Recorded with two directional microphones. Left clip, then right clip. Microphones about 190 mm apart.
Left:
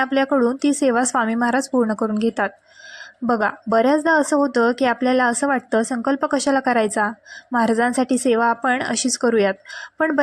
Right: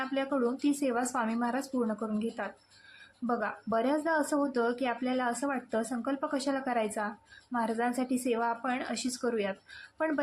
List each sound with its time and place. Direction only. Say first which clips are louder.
0.0 s speech: left 13 dB; 45° left (ahead or behind)